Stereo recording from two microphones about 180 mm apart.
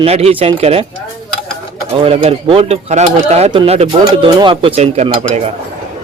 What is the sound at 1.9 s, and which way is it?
Speech, 35° right (ahead or behind).